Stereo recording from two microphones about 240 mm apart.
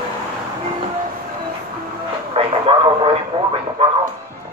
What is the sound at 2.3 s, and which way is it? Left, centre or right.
Radio, right.